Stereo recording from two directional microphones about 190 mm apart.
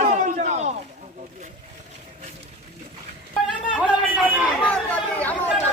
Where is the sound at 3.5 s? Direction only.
5° right (ahead or behind).